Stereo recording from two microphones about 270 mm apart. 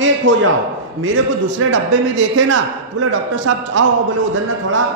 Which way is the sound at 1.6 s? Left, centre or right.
Right.